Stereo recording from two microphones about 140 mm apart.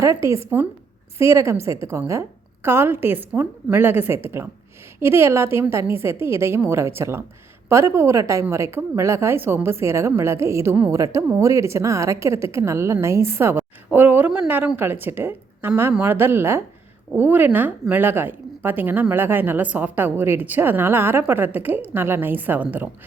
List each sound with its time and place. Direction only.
0.0 s a woman's voice: 20° right (ahead or behind)